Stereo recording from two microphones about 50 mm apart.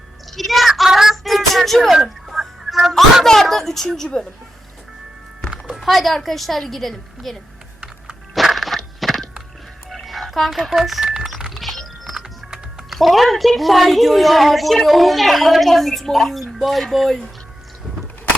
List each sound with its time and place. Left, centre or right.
0.3 s a sound: centre
0.9 s fowl: centre
3.2 s a woman's voice: centre
5.8 s a woman's voice: centre
8.4 s music: centre
11.0 s speech: centre
11.5 s horse: centre
12.1 s typing: centre
13.0 s a woman's voice: centre